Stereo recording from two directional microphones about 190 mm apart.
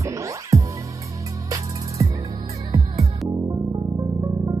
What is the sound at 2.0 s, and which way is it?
Music, 15° right (ahead or behind).